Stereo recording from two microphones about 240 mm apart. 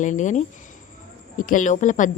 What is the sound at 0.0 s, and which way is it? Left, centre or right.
Speech, left.